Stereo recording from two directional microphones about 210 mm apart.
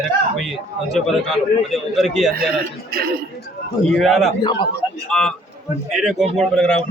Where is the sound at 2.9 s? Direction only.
45° right (ahead or behind).